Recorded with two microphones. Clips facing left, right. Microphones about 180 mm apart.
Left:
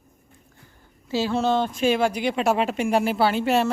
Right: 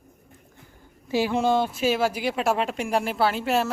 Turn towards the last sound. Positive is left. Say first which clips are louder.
# left 2 dB
turn(degrees=0)  # may be behind; listen again after turning